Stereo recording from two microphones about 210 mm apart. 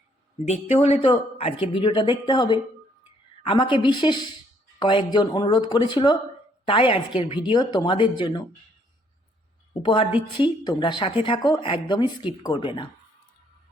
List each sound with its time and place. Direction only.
0.4 s a woman's voice: 30° left (ahead or behind)
9.8 s a woman's voice: 25° left (ahead or behind)